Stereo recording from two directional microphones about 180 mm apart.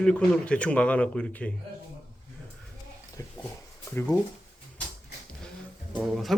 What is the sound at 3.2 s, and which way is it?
Dog, 20° left (ahead or behind).